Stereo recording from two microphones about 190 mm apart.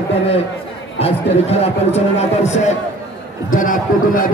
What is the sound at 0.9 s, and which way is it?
A man's voice, 30° left (ahead or behind).